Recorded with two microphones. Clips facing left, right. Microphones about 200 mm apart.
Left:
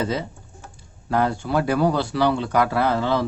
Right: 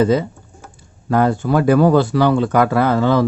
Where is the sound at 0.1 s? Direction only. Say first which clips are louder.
Right 10 dB; 50° right (ahead or behind).